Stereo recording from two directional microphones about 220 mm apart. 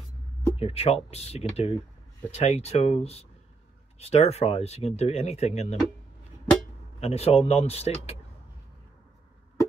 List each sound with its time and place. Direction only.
0.6 s speech: 25° left (ahead or behind)
7.0 s speech: 30° left (ahead or behind)